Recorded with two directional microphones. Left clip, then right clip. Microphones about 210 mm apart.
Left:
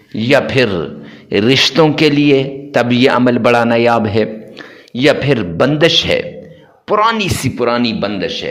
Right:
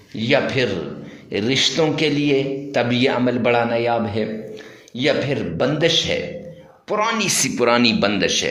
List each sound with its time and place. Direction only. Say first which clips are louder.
0.1 s a man's voice: left 6 dB; 30° left (ahead or behind)
7.5 s speech: left 1 dB; 10° left (ahead or behind)